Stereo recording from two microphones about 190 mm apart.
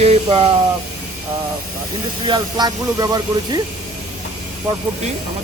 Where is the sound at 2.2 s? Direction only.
25° right (ahead or behind).